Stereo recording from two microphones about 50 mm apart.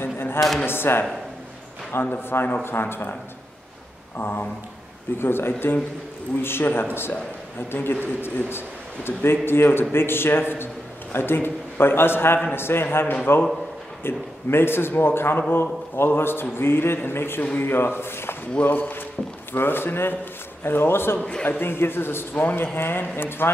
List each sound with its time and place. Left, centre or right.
0.0 s a sound: left
0.7 s a man's voice: left
4.2 s a man's voice: left
5.2 s a man's voice: left
12.9 s a man's voice: left
14.0 s a man's voice: left
18.6 s a man's voice: left